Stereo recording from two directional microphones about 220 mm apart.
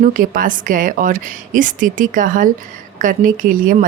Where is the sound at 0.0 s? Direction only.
40° right (ahead or behind).